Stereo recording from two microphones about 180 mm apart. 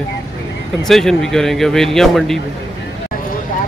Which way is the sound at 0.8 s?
5° left (ahead or behind).